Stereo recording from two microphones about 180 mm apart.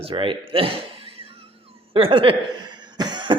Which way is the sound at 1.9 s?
30° right (ahead or behind).